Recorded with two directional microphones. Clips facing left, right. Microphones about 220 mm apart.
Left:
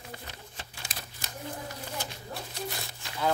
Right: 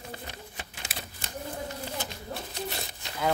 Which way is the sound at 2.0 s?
20° right (ahead or behind).